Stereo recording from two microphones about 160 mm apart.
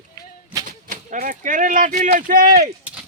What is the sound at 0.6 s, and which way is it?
Speech, 55° right (ahead or behind).